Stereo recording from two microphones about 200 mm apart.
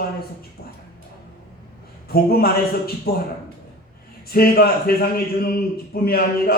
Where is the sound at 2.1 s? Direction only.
50° left (ahead or behind).